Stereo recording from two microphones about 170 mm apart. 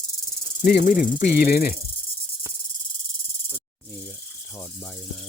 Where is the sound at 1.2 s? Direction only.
65° left (ahead or behind).